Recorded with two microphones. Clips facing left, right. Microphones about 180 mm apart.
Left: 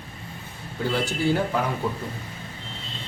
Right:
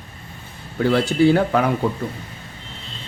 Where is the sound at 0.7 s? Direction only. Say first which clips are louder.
Right 9 dB; 70° right (ahead or behind).